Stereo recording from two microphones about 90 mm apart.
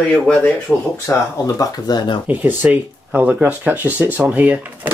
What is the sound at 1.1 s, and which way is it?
Speech, 25° left (ahead or behind).